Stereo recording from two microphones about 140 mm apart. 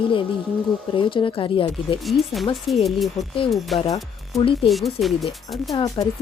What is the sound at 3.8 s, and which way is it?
Speech, 25° left (ahead or behind).